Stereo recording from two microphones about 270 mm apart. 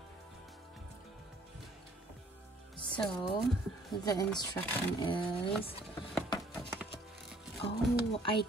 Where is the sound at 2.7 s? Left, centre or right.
Centre.